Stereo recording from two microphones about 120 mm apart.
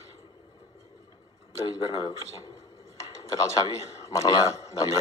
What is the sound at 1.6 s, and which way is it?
Speech, 35° left (ahead or behind).